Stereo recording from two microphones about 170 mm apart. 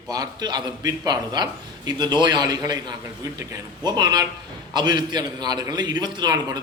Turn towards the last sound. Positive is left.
turn(degrees=-25)  # may be behind; listen again after turning